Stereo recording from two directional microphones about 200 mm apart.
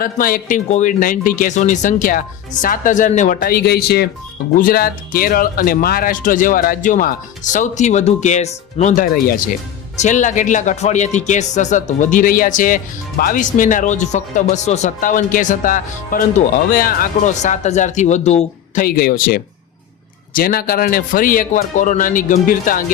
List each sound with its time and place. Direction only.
0.0 s speech: 45° left (ahead or behind)